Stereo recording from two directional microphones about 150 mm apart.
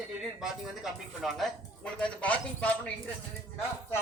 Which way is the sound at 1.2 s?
Centre (ahead or behind).